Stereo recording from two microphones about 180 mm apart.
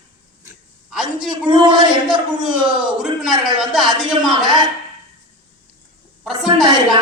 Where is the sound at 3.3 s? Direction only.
25° right (ahead or behind).